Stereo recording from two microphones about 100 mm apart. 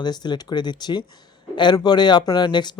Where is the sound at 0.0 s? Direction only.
45° left (ahead or behind).